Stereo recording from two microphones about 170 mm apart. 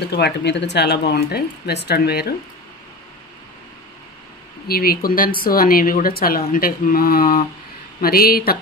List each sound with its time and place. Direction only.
0.1 s speech: 80° left
4.6 s speech: 60° left (ahead or behind)